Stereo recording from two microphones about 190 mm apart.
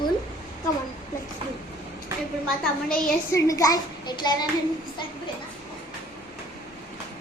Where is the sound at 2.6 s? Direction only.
5° left (ahead or behind).